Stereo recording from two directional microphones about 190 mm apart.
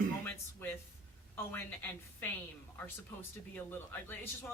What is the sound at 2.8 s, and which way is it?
Speech, 10° left (ahead or behind).